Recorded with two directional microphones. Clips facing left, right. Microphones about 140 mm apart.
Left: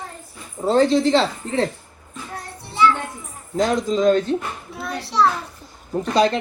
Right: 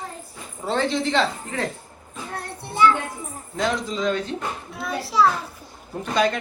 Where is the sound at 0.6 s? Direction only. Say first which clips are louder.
Left 7 dB; 40° left (ahead or behind).